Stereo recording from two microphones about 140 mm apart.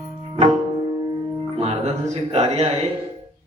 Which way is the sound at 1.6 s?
50° right (ahead or behind).